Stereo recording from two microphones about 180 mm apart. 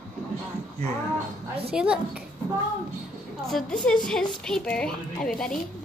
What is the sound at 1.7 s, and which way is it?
Speech, 5° right (ahead or behind).